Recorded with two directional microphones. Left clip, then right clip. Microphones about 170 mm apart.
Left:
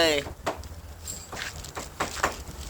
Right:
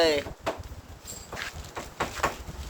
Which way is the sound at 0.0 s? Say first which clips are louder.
Even; centre (ahead or behind).